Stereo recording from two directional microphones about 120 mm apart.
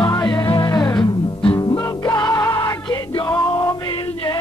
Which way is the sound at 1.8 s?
30° left (ahead or behind).